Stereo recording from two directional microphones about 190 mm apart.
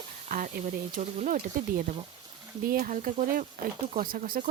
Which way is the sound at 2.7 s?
50° right (ahead or behind).